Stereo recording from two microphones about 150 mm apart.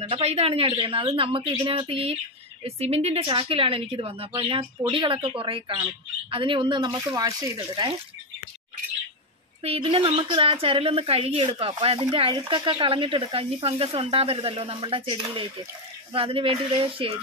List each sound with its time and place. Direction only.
0.0 s a woman's voice: 45° right (ahead or behind)
9.6 s a woman's voice: 40° right (ahead or behind)